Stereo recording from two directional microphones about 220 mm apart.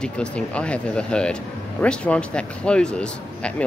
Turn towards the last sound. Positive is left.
turn(degrees=5)  # may be behind; listen again after turning